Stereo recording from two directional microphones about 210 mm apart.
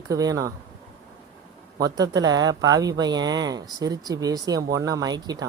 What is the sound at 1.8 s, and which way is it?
Speech, 20° right (ahead or behind).